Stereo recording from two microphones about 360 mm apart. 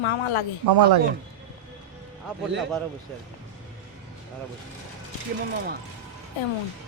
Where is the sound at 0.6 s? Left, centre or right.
Right.